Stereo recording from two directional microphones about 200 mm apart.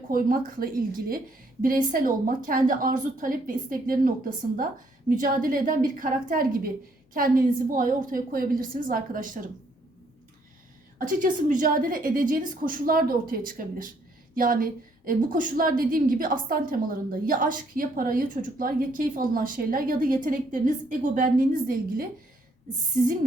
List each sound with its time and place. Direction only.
0.1 s a woman's voice: 45° right (ahead or behind)
11.0 s a woman's voice: 40° right (ahead or behind)